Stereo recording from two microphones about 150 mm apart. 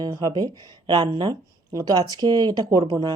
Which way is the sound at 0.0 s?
25° right (ahead or behind).